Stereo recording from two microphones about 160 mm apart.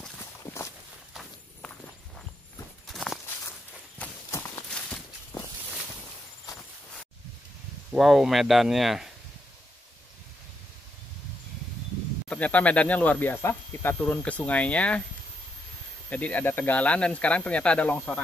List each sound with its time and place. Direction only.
1.1 s walk: 5° left (ahead or behind)
2.9 s walk: centre (ahead or behind)
4.0 s clip-clop: 15° left (ahead or behind)
4.7 s walk: 5° left (ahead or behind)
7.9 s speech: centre (ahead or behind)
12.3 s speech: 10° left (ahead or behind)
16.1 s speech: 10° left (ahead or behind)